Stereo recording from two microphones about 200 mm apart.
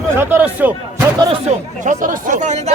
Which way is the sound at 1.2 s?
30° right (ahead or behind).